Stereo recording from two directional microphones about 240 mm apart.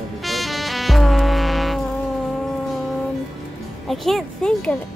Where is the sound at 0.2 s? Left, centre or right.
Centre.